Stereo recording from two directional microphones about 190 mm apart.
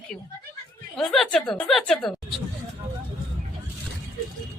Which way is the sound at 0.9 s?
Centre (ahead or behind).